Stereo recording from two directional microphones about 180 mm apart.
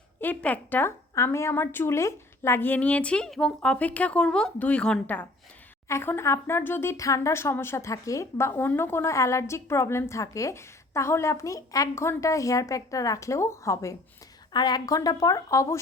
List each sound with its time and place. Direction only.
0.2 s speech: 10° left (ahead or behind)